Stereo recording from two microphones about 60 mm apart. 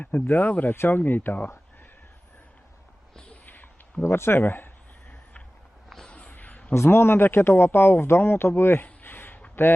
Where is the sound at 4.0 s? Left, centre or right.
Left.